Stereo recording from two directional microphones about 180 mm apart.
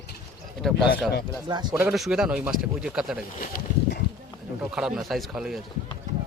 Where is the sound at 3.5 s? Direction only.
65° left (ahead or behind).